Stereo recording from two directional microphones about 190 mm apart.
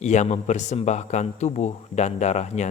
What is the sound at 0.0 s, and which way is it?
A man's voice, 35° left (ahead or behind).